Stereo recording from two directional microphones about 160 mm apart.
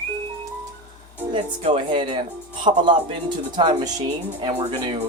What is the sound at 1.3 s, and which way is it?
Speech, 35° right (ahead or behind).